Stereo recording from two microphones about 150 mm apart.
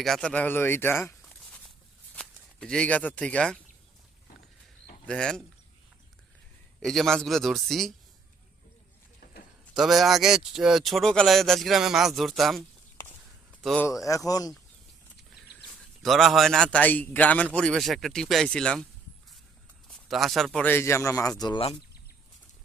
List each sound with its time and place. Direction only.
0.0 s a man's voice: 5° left (ahead or behind)
2.1 s speech: 5° left (ahead or behind)
5.0 s speech: 5° left (ahead or behind)
6.7 s speech: 5° left (ahead or behind)
9.2 s a sound: 90° left
9.7 s speech: centre (ahead or behind)
13.8 s speech: 20° left (ahead or behind)
16.0 s speech: centre (ahead or behind)
19.9 s a man's voice: centre (ahead or behind); by 21.6 s 25° left (ahead or behind)